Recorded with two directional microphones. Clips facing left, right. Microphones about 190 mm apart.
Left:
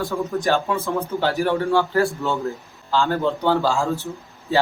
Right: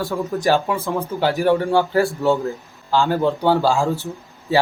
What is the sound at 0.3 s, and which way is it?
Speech, 10° right (ahead or behind).